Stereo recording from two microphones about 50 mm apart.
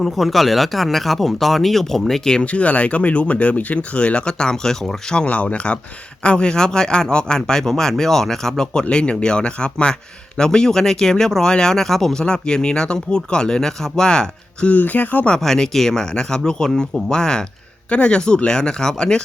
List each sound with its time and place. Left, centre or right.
0.0 s speech: centre
2.4 s speech: left
5.2 s speech: left
14.7 s speech: left
15.4 s speech: centre